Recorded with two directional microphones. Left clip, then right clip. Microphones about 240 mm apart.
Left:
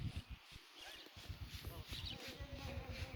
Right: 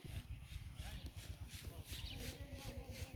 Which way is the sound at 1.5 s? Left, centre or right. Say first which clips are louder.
Left 3 dB; right.